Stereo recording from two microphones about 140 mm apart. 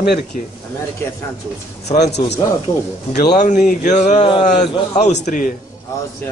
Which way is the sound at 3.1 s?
60° left (ahead or behind).